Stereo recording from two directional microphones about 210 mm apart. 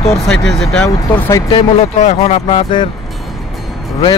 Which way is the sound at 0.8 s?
15° left (ahead or behind).